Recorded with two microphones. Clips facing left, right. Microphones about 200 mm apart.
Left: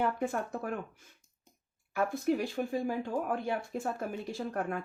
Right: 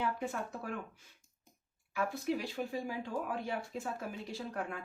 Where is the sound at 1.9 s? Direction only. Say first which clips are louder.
Left 5 dB; 50° left (ahead or behind).